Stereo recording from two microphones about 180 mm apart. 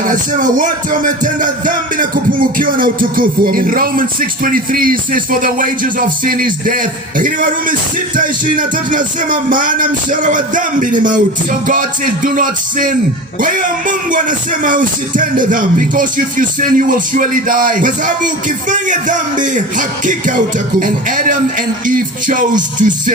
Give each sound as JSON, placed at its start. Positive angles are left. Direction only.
{"t": 0.0, "sound": "music", "side_deg": -45}